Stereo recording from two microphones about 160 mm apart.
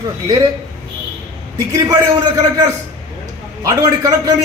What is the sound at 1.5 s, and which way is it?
A man's voice, 20° right (ahead or behind).